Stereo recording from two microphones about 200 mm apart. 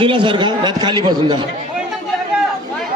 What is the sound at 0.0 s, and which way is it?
A man's voice, 25° right (ahead or behind).